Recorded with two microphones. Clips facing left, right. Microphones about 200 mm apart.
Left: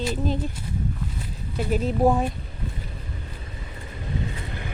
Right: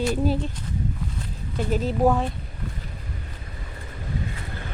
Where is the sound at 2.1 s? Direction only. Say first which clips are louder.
Left 1 dB; 10° left (ahead or behind).